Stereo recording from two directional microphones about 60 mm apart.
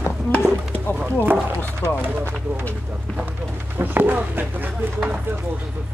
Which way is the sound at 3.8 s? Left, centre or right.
Right.